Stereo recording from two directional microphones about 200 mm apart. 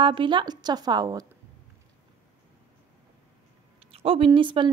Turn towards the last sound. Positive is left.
turn(degrees=-25)  # may be behind; listen again after turning